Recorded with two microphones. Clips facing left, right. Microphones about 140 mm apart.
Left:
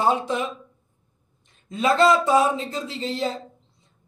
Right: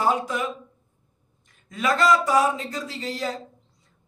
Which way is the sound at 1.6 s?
25° left (ahead or behind).